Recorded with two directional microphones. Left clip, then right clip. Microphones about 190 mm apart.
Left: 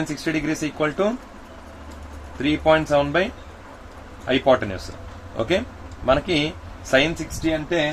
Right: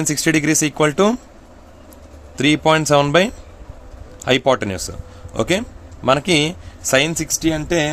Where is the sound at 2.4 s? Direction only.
75° right (ahead or behind).